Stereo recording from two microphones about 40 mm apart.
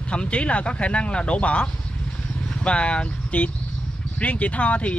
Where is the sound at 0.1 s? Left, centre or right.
Left.